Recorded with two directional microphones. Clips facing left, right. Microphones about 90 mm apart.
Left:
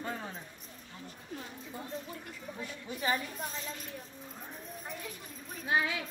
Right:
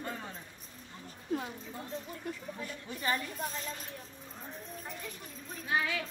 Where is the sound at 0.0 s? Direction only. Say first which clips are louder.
Left 2 dB; 5° left (ahead or behind).